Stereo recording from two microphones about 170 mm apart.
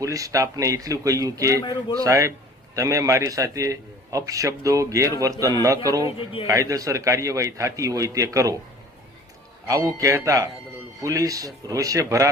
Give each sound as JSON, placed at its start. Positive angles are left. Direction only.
{"t": 0.0, "sound": "a man's voice", "side_deg": -20}
{"t": 6.1, "sound": "a man's voice", "side_deg": 30}
{"t": 6.5, "sound": "a man's voice", "side_deg": -20}
{"t": 9.6, "sound": "a man's voice", "side_deg": -20}